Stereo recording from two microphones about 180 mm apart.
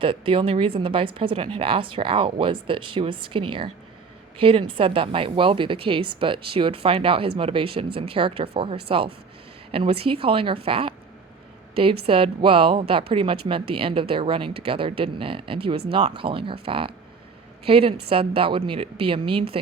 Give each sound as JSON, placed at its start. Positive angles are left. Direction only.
{"t": 0.0, "sound": "a woman's voice", "side_deg": -30}